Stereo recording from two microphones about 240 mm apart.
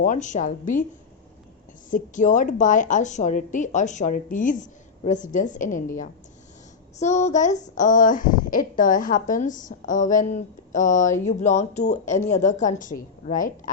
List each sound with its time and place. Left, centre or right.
0.0 s speech: left
1.9 s speech: left
7.0 s speech: left